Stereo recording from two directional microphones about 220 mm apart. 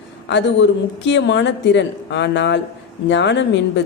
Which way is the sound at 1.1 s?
55° left (ahead or behind).